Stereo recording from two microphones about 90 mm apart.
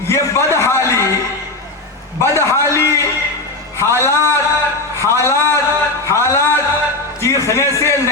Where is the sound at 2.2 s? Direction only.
30° left (ahead or behind).